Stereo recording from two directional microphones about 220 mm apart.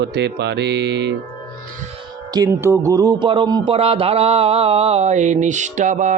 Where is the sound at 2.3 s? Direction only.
15° right (ahead or behind).